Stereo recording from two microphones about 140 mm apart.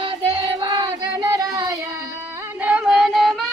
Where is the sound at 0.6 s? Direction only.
35° right (ahead or behind).